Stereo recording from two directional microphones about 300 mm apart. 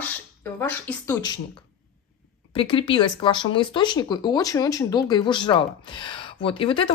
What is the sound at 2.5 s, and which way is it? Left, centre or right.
Speech, centre.